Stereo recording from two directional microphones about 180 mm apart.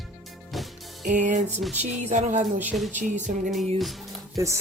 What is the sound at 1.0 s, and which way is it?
Music, 45° right (ahead or behind).